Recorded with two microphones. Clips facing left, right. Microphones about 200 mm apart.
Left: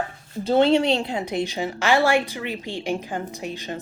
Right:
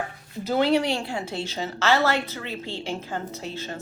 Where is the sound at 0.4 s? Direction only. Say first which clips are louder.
Left 4 dB; 25° left (ahead or behind).